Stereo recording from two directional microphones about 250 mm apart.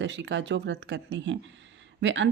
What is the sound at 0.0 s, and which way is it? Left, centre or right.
Speech, right.